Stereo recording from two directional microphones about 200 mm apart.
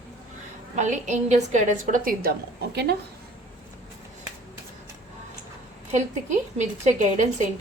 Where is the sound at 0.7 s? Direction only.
35° right (ahead or behind).